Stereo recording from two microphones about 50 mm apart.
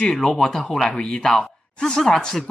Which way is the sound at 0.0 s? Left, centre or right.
Centre.